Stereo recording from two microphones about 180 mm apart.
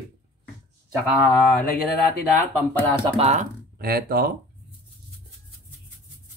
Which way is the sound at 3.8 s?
55° right (ahead or behind).